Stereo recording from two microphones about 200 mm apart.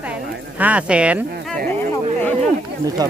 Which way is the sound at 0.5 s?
5° right (ahead or behind).